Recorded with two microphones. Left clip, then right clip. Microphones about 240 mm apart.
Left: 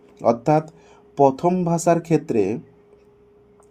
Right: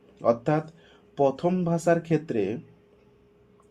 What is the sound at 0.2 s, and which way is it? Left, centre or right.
Speech, left.